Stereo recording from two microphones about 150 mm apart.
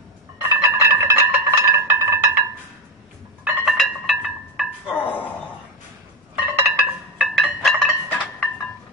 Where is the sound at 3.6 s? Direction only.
Centre (ahead or behind).